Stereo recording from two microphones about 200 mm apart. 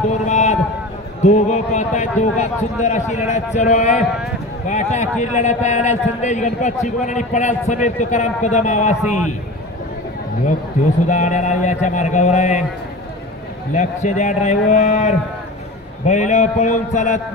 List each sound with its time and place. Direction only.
0.3 s a sound: 35° left (ahead or behind)
1.2 s a man's voice: 35° left (ahead or behind)
11.1 s a man's voice: 35° left (ahead or behind)
13.7 s a man's voice: 35° left (ahead or behind)